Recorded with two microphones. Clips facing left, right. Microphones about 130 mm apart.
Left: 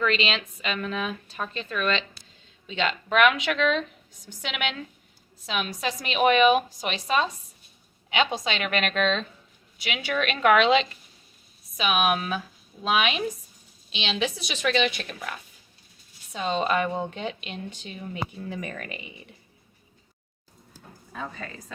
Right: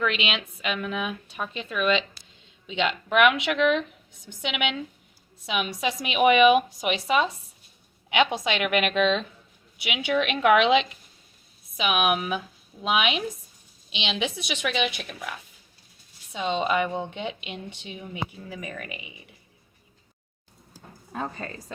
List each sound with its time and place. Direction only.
0.0 s a woman's voice: 10° right (ahead or behind)
21.1 s a woman's voice: 45° right (ahead or behind)